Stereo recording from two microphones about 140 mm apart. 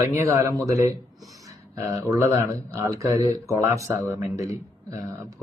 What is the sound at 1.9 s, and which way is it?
Speech, 20° right (ahead or behind).